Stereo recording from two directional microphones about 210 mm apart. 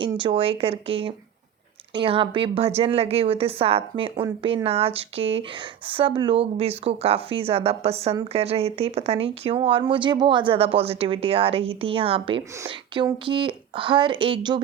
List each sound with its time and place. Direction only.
0.0 s speech: 25° right (ahead or behind)